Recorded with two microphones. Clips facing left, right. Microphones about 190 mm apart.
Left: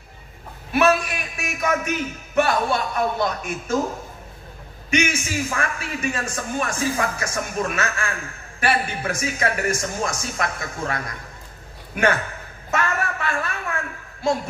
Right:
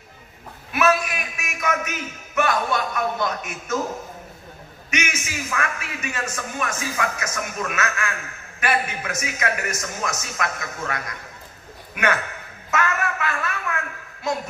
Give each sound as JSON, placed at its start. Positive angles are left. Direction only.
{"t": 0.7, "sound": "a man's voice", "side_deg": 35}
{"t": 4.9, "sound": "a man's voice", "side_deg": 30}
{"t": 12.7, "sound": "a sound", "side_deg": 30}